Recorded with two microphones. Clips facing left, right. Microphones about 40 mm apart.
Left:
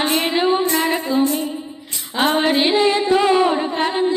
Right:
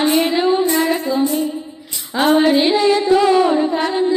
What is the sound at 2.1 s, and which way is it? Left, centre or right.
Music, left.